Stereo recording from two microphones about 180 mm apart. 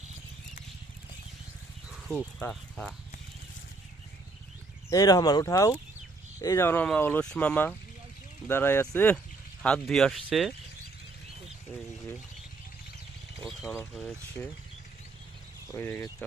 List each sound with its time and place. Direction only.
2.4 s speech: 5° left (ahead or behind)
4.9 s speech: 20° left (ahead or behind); by 10.5 s centre (ahead or behind)
13.4 s a sound: centre (ahead or behind)
13.9 s speech: centre (ahead or behind)
15.7 s speech: 15° left (ahead or behind)